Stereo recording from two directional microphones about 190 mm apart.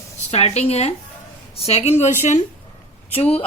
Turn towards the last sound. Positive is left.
turn(degrees=30)  # may be behind; listen again after turning